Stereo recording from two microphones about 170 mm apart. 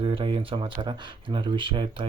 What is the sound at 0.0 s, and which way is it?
Speech, 30° right (ahead or behind).